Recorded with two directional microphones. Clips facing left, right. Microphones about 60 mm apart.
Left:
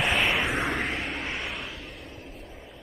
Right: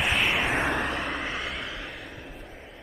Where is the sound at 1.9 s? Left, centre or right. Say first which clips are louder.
Right 2 dB; right.